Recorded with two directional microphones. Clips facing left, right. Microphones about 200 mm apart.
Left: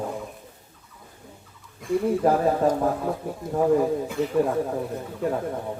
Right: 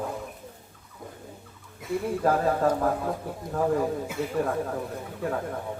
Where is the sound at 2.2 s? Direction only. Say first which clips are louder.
Even; 20° left (ahead or behind).